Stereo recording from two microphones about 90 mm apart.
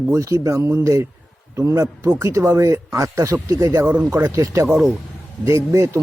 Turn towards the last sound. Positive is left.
turn(degrees=-35)  # may be behind; listen again after turning